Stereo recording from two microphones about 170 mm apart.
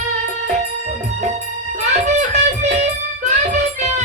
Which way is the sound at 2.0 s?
45° right (ahead or behind).